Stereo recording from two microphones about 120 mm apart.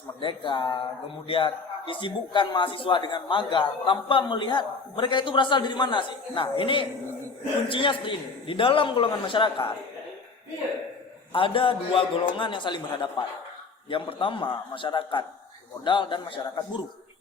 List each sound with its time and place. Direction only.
0.2 s a man's voice: 40° left (ahead or behind)
11.3 s a man's voice: 50° left (ahead or behind)